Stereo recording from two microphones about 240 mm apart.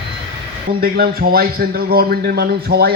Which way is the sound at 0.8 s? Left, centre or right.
Right.